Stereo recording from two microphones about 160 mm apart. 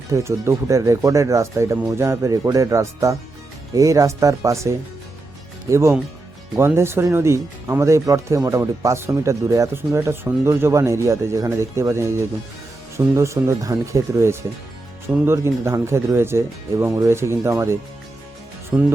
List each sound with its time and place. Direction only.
0.1 s speech: 15° right (ahead or behind)
13.1 s speech: 20° right (ahead or behind)
18.7 s speech: 5° right (ahead or behind)